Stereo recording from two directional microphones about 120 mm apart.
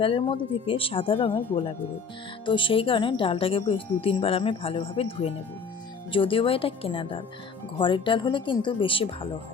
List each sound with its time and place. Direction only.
0.0 s speech: 50° left (ahead or behind)